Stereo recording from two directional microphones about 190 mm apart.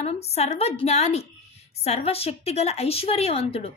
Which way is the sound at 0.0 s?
35° left (ahead or behind).